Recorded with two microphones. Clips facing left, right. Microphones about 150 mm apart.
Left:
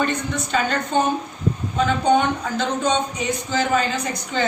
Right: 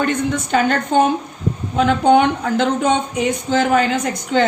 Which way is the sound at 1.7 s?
65° right (ahead or behind).